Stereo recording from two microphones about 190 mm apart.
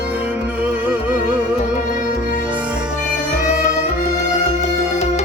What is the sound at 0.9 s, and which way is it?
Music, 10° right (ahead or behind).